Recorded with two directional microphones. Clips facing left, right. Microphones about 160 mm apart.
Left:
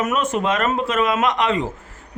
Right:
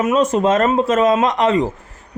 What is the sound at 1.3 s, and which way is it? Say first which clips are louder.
Speech: right 5 dB; 40° right (ahead or behind).